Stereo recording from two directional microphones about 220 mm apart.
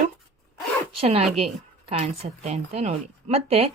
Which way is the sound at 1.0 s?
30° right (ahead or behind).